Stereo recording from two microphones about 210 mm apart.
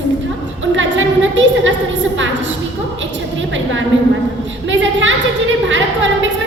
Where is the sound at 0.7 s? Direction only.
60° right (ahead or behind).